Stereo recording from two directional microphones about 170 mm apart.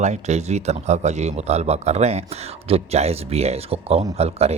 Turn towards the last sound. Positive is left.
turn(degrees=-40)  # may be behind; listen again after turning